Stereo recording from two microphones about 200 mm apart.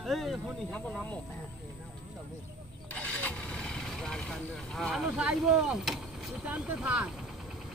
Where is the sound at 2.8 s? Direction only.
5° left (ahead or behind).